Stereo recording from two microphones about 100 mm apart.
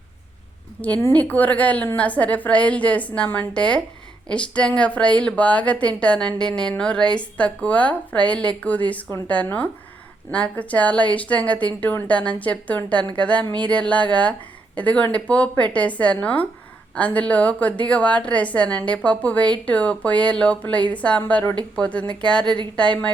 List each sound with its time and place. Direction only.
0.8 s a woman's voice: 15° left (ahead or behind)